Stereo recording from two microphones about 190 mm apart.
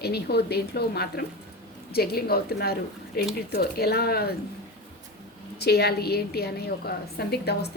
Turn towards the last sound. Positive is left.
turn(degrees=60)  # may be behind; listen again after turning